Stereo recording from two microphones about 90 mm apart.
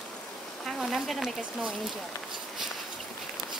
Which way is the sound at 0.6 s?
Centre (ahead or behind).